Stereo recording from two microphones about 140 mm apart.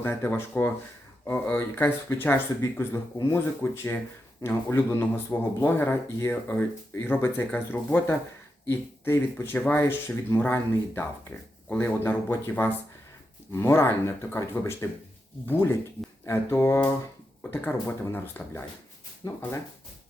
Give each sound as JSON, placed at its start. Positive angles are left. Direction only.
{"t": 0.0, "sound": "speech", "side_deg": 15}
{"t": 16.2, "sound": "speech", "side_deg": 15}